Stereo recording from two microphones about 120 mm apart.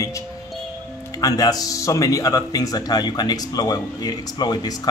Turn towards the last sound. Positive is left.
turn(degrees=35)  # may be behind; listen again after turning